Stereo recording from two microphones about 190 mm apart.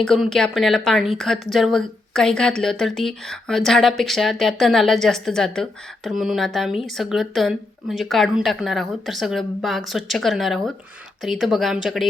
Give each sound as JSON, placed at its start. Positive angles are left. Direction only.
{"t": 0.0, "sound": "speech", "side_deg": 0}